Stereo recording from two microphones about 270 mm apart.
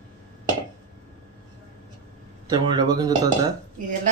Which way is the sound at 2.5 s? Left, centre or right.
Centre.